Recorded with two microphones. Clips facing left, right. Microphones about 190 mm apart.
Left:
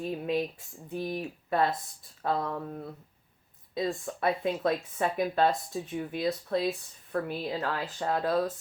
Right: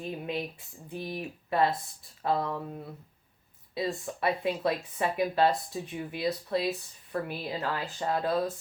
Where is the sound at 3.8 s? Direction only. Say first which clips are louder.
Left 1 dB; 5° right (ahead or behind).